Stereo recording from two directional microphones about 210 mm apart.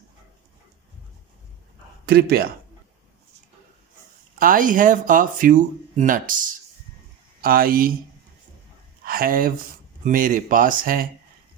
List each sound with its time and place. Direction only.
2.0 s speech: 45° right (ahead or behind)
4.4 s speech: 40° right (ahead or behind)
7.4 s speech: 45° right (ahead or behind)
9.0 s speech: 45° right (ahead or behind)